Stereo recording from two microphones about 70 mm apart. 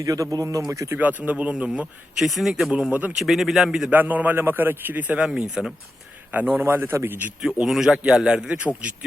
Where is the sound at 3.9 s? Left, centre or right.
Right.